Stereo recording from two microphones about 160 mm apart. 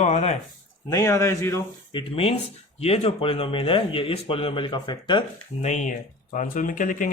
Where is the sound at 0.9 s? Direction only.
20° left (ahead or behind).